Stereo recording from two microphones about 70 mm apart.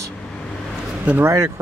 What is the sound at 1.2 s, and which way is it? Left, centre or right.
Speech, right.